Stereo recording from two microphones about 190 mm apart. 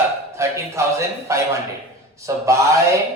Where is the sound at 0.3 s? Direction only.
15° right (ahead or behind).